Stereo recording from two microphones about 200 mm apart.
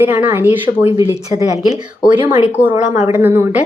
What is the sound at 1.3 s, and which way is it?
Speech, 35° left (ahead or behind).